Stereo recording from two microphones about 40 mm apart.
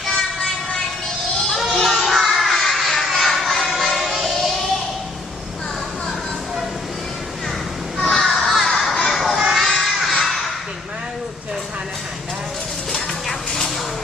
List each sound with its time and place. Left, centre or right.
0.0 s vehicle: centre
1.7 s children playing: centre
3.2 s music: centre
8.1 s a sound: centre
9.0 s children playing: centre
10.1 s a sound: centre
12.9 s music: centre